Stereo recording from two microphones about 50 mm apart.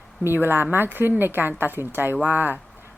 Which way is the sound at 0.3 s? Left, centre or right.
Right.